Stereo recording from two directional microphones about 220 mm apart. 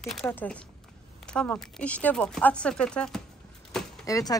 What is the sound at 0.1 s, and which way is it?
Speech, 5° left (ahead or behind).